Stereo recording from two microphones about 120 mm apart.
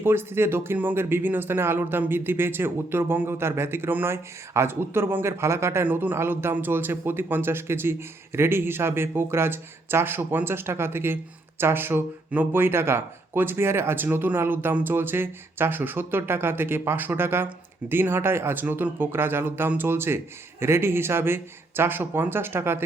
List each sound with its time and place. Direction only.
0.0 s speech: 20° right (ahead or behind)